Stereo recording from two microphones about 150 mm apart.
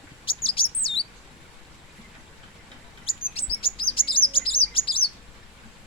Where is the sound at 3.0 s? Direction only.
40° left (ahead or behind).